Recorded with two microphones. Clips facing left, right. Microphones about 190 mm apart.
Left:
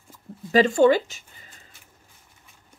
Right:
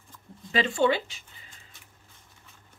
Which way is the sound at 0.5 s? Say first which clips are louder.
Left 7 dB; 40° left (ahead or behind).